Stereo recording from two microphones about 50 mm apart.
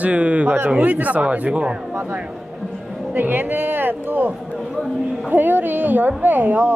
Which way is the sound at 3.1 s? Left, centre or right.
Right.